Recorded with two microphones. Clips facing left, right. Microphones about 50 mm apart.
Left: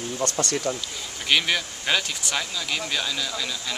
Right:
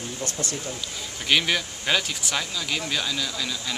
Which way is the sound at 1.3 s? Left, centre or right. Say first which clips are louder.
Even; centre.